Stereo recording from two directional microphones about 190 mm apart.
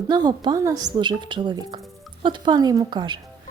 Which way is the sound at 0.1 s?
20° right (ahead or behind).